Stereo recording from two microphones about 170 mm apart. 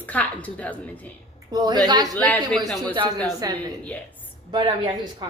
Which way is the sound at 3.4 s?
20° right (ahead or behind).